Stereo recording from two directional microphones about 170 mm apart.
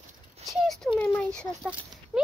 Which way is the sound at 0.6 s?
5° left (ahead or behind).